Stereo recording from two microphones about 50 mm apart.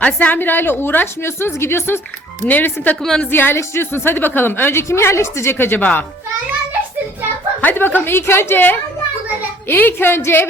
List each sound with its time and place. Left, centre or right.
0.0 s a woman's voice: left
0.3 s a woman's voice: left
2.5 s speech: left
3.3 s a woman's voice: left
4.9 s a woman's voice: left
5.5 s a woman's voice: left
5.8 s speech: left
7.6 s a woman's voice: left